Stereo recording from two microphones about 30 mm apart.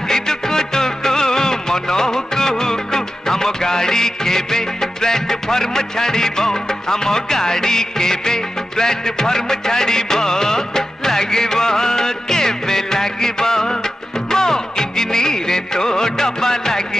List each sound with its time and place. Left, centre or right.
0.1 s music: centre